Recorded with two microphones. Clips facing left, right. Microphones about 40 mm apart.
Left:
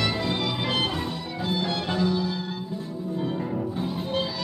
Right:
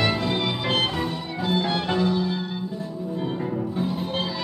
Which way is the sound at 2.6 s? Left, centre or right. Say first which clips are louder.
Right 2 dB; centre.